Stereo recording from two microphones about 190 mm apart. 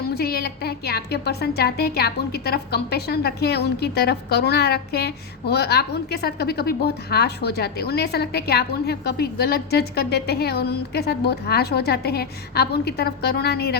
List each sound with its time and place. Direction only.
0.1 s speech: 55° left (ahead or behind)